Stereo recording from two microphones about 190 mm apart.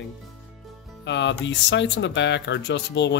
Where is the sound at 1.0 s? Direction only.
70° left (ahead or behind).